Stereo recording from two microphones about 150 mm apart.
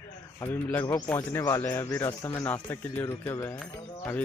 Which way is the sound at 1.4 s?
25° left (ahead or behind).